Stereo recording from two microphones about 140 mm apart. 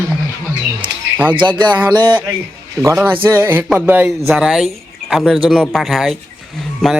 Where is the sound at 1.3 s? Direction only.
35° right (ahead or behind).